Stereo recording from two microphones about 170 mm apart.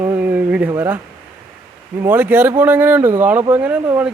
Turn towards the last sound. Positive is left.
turn(degrees=-10)  # may be behind; listen again after turning